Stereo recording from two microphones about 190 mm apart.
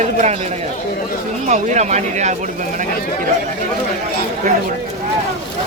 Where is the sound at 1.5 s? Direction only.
40° right (ahead or behind).